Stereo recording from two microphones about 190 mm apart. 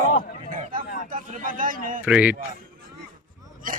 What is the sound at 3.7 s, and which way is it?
Speech, 45° right (ahead or behind).